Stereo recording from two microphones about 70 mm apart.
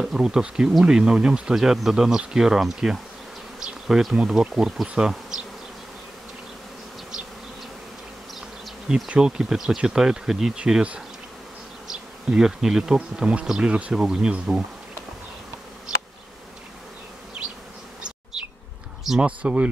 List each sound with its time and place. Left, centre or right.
0.0 s speech: centre
8.8 s speech: centre
11.9 s bee: centre
13.5 s speech: centre
18.3 s bee: centre
19.2 s speech: centre